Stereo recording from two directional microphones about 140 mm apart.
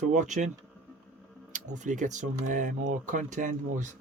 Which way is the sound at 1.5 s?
60° right (ahead or behind).